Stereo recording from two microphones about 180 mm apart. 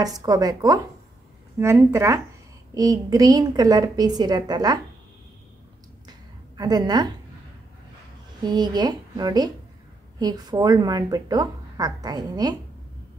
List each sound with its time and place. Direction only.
0.0 s a woman's voice: 20° right (ahead or behind)
6.0 s a sound: 20° right (ahead or behind)
8.4 s a woman's voice: 25° right (ahead or behind)